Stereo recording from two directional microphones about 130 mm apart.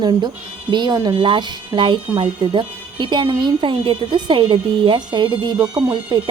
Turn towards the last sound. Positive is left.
turn(degrees=-35)  # may be behind; listen again after turning